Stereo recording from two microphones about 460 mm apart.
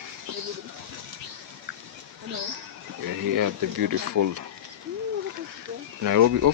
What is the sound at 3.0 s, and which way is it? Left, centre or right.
Speech, right.